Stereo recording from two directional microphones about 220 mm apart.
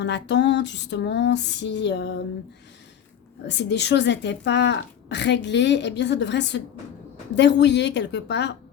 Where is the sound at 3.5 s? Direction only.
50° left (ahead or behind).